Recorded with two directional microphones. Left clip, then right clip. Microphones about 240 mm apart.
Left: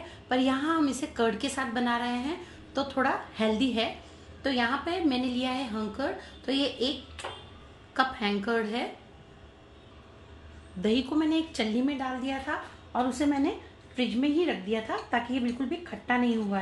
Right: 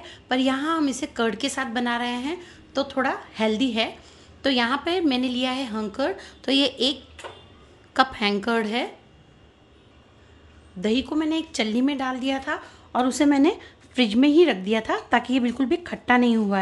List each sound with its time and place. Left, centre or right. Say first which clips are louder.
0.1 s a woman's voice: right 4 dB; right
10.8 s a woman's voice: right 3 dB; right